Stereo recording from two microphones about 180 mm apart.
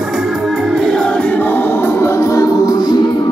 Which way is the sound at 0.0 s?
Centre (ahead or behind).